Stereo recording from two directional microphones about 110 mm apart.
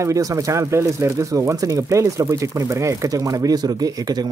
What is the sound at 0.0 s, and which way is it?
Speech, 30° right (ahead or behind).